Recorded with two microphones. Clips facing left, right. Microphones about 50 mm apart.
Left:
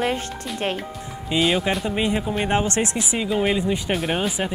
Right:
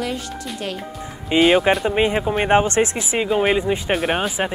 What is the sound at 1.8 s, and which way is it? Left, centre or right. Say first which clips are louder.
Speech: right 4 dB; right.